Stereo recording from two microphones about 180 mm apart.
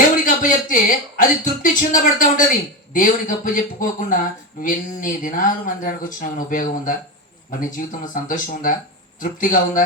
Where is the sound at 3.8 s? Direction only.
45° left (ahead or behind).